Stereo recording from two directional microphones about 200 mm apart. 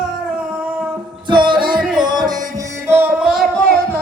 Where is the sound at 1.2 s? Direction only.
25° right (ahead or behind); by 3.6 s centre (ahead or behind).